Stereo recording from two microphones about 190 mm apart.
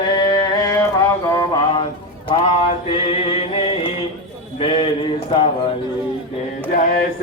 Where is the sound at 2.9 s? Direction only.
30° left (ahead or behind).